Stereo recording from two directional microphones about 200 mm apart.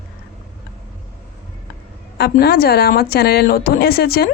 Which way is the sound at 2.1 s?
50° left (ahead or behind).